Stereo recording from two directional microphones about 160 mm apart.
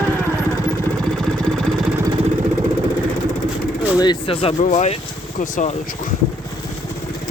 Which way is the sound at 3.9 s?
30° left (ahead or behind).